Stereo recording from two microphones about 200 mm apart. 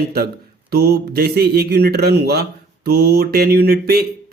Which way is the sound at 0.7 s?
55° right (ahead or behind).